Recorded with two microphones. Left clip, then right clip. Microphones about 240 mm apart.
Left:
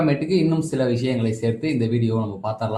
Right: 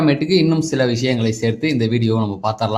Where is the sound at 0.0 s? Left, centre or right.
Right.